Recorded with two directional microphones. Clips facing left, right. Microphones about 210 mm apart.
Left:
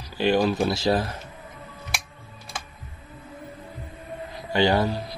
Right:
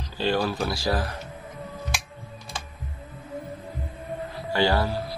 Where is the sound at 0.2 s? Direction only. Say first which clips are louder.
Left 4 dB; 15° left (ahead or behind).